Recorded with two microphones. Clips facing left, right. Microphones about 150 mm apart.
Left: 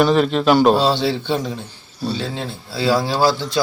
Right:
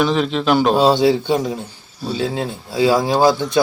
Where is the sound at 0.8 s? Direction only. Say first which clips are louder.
Right 5 dB; 15° right (ahead or behind).